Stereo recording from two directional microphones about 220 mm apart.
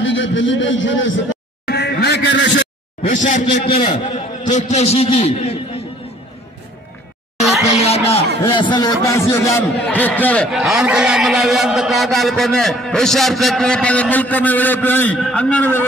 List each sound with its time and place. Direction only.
0.0 s a man's voice: 60° left (ahead or behind)
3.0 s a man's voice: 35° left (ahead or behind)
3.6 s a man's voice: 20° left (ahead or behind)
3.9 s a man's voice: 35° left (ahead or behind)
7.7 s music: 25° left (ahead or behind)
8.5 s a man's voice: 20° left (ahead or behind)